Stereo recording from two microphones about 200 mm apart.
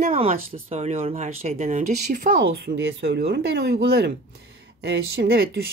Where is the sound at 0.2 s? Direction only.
35° right (ahead or behind).